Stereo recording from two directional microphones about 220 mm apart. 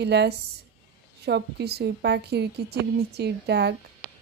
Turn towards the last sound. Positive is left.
turn(degrees=-50)  # may be behind; listen again after turning